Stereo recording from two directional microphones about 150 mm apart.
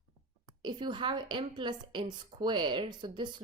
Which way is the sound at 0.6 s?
30° right (ahead or behind).